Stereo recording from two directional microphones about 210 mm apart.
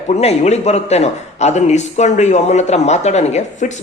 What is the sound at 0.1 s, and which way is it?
Speech, 30° left (ahead or behind).